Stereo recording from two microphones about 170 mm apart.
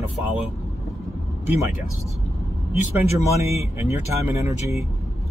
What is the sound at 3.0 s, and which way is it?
Speech, 15° right (ahead or behind).